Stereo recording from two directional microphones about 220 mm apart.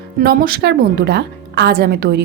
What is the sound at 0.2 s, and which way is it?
A woman's voice, 40° right (ahead or behind).